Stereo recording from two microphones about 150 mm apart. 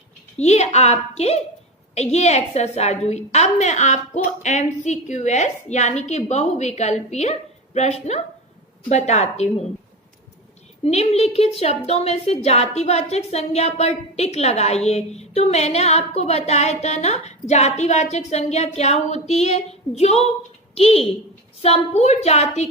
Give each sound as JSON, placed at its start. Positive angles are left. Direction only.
{"t": 0.3, "sound": "a woman's voice", "side_deg": 45}
{"t": 10.8, "sound": "a woman's voice", "side_deg": 45}